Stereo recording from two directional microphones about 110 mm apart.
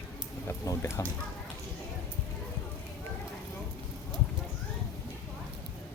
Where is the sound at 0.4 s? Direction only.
30° left (ahead or behind).